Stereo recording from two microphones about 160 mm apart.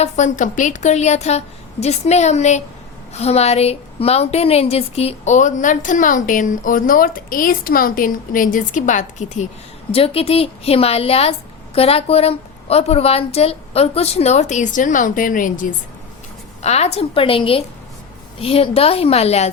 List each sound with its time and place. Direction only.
0.0 s a woman's voice: 50° left (ahead or behind)
9.9 s speech: 35° left (ahead or behind); by 15.6 s 55° left (ahead or behind)
16.6 s speech: 40° left (ahead or behind)